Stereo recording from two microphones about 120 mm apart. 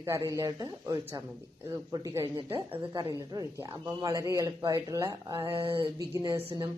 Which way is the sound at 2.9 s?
35° right (ahead or behind).